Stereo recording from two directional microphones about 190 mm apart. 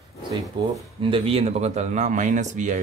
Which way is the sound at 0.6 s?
25° right (ahead or behind).